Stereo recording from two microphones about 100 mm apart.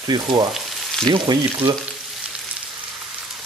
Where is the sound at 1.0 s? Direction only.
50° right (ahead or behind).